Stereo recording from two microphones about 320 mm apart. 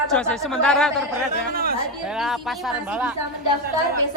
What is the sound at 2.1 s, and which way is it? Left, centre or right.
Speech, centre.